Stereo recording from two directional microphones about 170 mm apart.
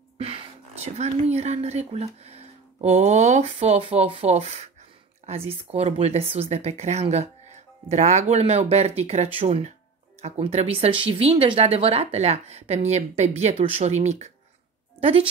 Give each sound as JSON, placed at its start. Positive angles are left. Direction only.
{"t": 0.2, "sound": "a woman's voice", "side_deg": -35}